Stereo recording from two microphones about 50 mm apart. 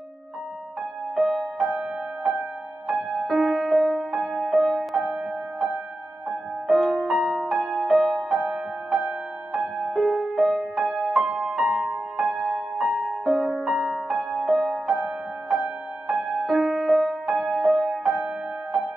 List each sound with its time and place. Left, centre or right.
1.1 s music: centre
1.6 s music: centre
6.7 s music: centre
8.4 s music: centre
9.9 s music: centre
12.3 s music: centre
12.7 s music: centre
15.6 s music: centre